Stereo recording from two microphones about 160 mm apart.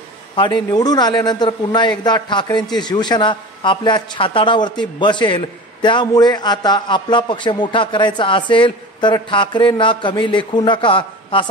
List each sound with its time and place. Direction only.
0.4 s a man's voice: 30° left (ahead or behind)